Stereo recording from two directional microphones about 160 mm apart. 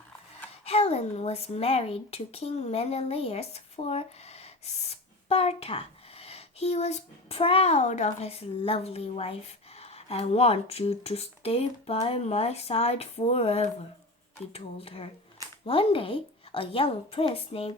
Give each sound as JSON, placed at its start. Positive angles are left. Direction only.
{"t": 0.6, "sound": "speech", "side_deg": 40}